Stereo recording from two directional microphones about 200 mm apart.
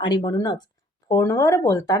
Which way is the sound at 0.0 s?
25° left (ahead or behind).